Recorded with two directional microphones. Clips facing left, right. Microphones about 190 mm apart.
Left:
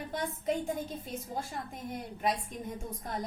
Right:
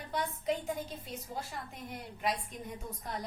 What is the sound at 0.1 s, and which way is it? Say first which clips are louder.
A woman's voice: even; 45° left (ahead or behind).